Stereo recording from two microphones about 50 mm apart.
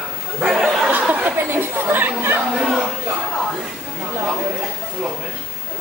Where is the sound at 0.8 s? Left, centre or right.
Right.